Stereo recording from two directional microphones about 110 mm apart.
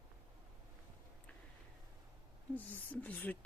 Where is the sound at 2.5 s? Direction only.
15° left (ahead or behind).